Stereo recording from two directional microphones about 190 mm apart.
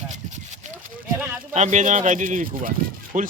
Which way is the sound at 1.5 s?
40° right (ahead or behind).